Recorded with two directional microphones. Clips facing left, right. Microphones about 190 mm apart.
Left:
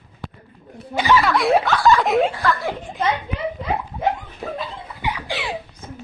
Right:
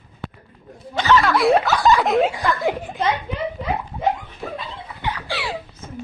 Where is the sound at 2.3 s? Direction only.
15° right (ahead or behind).